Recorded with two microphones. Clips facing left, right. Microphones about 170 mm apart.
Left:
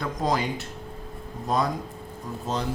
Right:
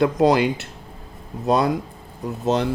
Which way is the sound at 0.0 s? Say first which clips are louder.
Right 10 dB; 70° right (ahead or behind).